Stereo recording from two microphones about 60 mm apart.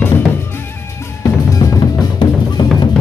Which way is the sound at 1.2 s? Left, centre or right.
Left.